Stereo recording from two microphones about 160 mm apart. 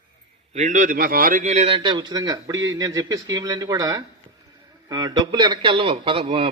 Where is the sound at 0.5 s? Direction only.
50° right (ahead or behind).